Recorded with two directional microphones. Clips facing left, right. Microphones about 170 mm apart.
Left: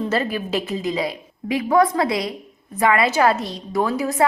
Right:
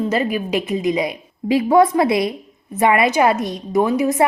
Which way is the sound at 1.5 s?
30° right (ahead or behind).